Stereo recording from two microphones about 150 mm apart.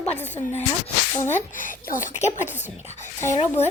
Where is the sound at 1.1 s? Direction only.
50° left (ahead or behind).